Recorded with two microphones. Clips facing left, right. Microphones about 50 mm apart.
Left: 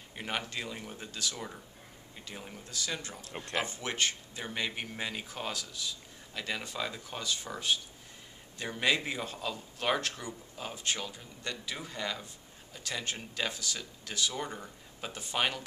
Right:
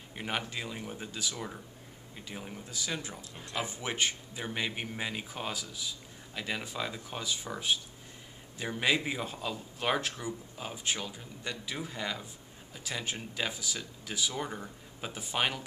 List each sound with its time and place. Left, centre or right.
0.1 s speech: centre
3.2 s speech: left
3.6 s speech: centre